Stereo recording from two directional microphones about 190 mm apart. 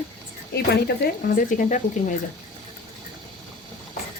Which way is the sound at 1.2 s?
45° left (ahead or behind).